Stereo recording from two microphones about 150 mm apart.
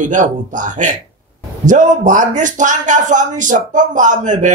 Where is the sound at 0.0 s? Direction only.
55° right (ahead or behind).